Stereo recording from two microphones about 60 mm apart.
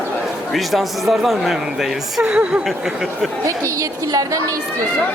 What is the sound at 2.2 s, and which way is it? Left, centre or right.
Speech, centre.